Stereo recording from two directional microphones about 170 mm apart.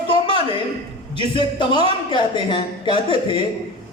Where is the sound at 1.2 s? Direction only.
30° left (ahead or behind).